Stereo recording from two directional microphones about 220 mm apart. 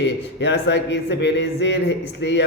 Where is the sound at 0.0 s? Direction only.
50° left (ahead or behind).